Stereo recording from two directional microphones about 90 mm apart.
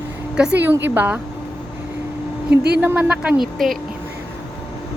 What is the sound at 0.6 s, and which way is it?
Speech, 20° right (ahead or behind).